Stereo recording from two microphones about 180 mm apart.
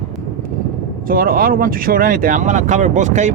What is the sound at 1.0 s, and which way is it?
Speech, 55° right (ahead or behind).